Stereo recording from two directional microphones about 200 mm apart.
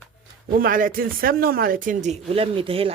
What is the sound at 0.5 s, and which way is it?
Speech, 45° right (ahead or behind).